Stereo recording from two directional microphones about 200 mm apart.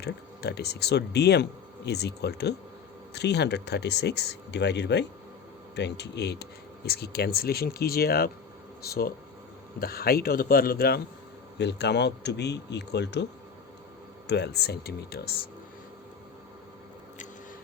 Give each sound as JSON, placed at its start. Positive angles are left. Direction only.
{"t": 0.0, "sound": "speech", "side_deg": 55}
{"t": 14.3, "sound": "speech", "side_deg": 55}